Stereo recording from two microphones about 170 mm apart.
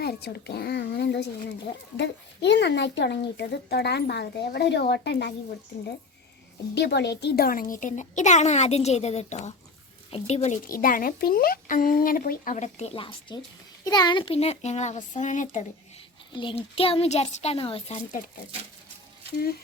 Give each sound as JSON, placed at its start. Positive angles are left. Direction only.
{"t": 0.0, "sound": "speech", "side_deg": 70}
{"t": 6.7, "sound": "a child's voice", "side_deg": 90}
{"t": 16.3, "sound": "a child's voice", "side_deg": 30}